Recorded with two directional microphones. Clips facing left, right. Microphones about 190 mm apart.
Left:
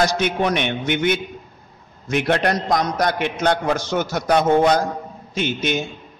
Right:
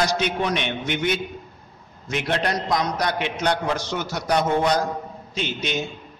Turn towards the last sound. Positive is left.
turn(degrees=50)  # may be behind; listen again after turning